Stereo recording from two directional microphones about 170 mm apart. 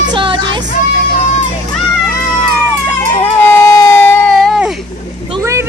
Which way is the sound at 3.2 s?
15° left (ahead or behind).